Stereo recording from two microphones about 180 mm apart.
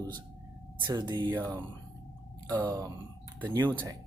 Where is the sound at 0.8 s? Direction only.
25° right (ahead or behind).